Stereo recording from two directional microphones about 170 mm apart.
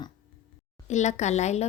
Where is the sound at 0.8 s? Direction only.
45° left (ahead or behind).